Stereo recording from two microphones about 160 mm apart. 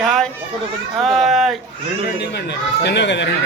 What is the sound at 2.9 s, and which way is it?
Speech, 90° left.